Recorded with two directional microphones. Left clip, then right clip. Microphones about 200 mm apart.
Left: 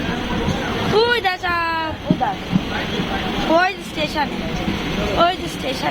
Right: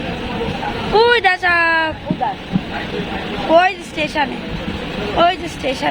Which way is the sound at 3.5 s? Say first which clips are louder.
Right 5 dB; 40° right (ahead or behind).